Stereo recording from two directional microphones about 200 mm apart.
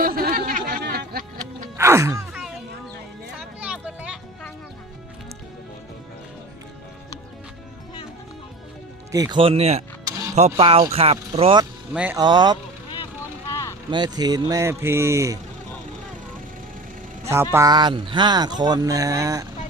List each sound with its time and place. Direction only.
0.0 s snicker: 45° right (ahead or behind)
1.8 s a sound: 15° right (ahead or behind)
3.3 s a sound: 5° right (ahead or behind)
9.1 s speech: 20° right (ahead or behind)
10.1 s a sound: 15° right (ahead or behind)
10.3 s speech: 30° right (ahead or behind)
13.5 s vehicle: 15° left (ahead or behind)
13.9 s speech: 20° right (ahead or behind)
17.2 s speech: 10° right (ahead or behind)